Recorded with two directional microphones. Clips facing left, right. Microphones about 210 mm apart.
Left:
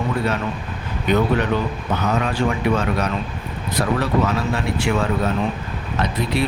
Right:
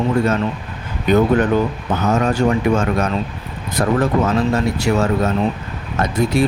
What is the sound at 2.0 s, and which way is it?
Speech, 45° right (ahead or behind).